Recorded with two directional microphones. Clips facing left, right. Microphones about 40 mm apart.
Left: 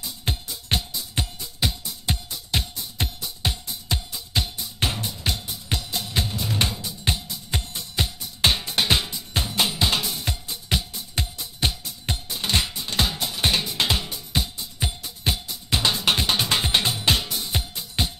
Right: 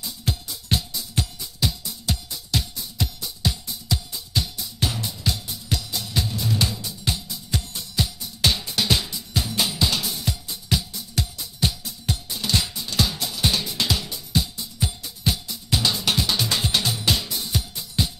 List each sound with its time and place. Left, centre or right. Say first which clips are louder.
0.2 s music: right 1 dB; left